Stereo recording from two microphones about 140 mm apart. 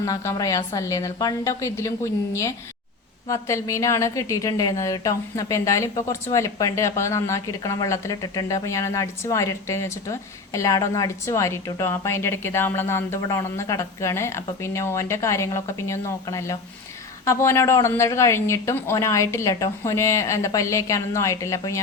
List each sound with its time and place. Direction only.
0.0 s a woman's voice: 25° left (ahead or behind)
3.2 s a woman's voice: 20° left (ahead or behind)